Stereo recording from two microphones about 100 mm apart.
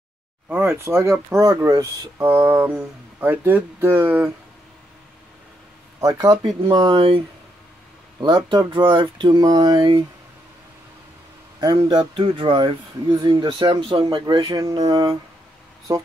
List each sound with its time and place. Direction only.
0.5 s speech: 25° right (ahead or behind)
5.9 s speech: 40° right (ahead or behind)
6.9 s speech: 60° right (ahead or behind)
8.2 s speech: 50° right (ahead or behind)
11.6 s speech: 45° right (ahead or behind)
12.2 s speech: 65° right (ahead or behind)
13.0 s speech: 45° right (ahead or behind)
14.0 s speech: 45° right (ahead or behind)